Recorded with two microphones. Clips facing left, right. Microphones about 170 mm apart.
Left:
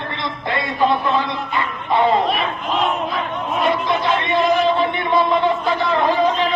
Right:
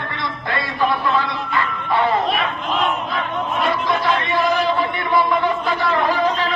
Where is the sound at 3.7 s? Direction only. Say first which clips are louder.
Even; 20° left (ahead or behind).